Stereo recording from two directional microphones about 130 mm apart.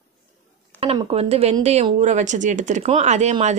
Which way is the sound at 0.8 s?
50° right (ahead or behind).